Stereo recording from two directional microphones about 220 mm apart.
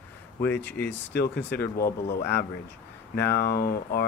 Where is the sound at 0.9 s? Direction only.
50° left (ahead or behind).